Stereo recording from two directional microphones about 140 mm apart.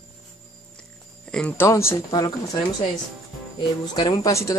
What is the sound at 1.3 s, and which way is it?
Speech, 10° left (ahead or behind).